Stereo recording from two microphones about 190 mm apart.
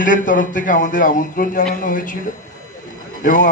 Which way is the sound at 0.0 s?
45° left (ahead or behind).